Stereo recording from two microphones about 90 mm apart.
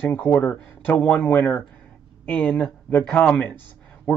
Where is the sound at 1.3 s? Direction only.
20° left (ahead or behind).